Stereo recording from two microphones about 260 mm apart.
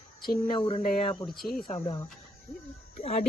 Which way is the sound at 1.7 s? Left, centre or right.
Centre.